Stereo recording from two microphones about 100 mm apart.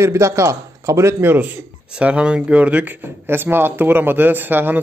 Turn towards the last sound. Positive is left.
turn(degrees=-20)  # may be behind; listen again after turning